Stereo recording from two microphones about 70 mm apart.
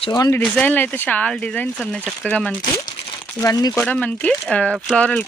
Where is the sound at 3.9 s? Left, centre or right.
Centre.